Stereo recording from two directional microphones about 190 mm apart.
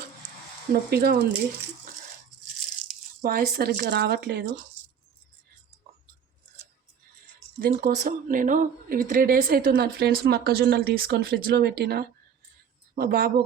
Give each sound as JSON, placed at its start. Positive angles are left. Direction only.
{"t": 0.7, "sound": "speech", "side_deg": -55}
{"t": 3.2, "sound": "speech", "side_deg": -55}
{"t": 7.6, "sound": "speech", "side_deg": -45}